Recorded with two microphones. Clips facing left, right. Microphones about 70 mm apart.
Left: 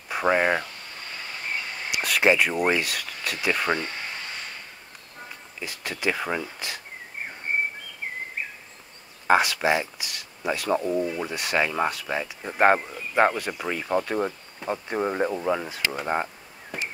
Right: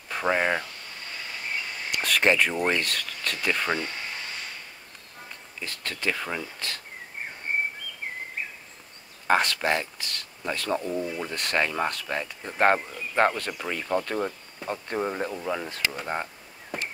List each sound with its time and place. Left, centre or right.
0.1 s speech: centre
1.9 s speech: centre
5.6 s speech: centre
9.3 s speech: centre